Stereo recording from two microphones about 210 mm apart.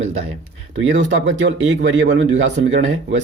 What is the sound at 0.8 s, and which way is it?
Speech, 65° right (ahead or behind).